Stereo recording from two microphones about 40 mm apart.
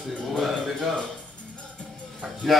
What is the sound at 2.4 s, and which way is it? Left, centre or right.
Speech, centre.